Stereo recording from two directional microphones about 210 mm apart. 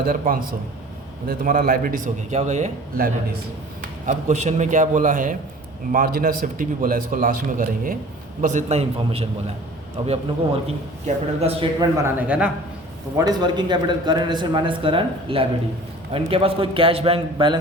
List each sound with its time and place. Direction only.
0.0 s a man's voice: 45° right (ahead or behind); by 11.9 s 25° right (ahead or behind)
12.0 s a man's voice: 5° right (ahead or behind)
13.1 s a man's voice: 20° right (ahead or behind)